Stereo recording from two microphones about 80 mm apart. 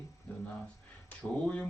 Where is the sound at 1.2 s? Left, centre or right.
Centre.